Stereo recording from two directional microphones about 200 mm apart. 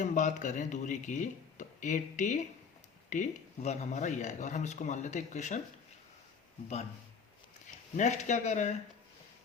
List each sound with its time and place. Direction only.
0.0 s speech: 35° left (ahead or behind)
7.9 s speech: 35° left (ahead or behind)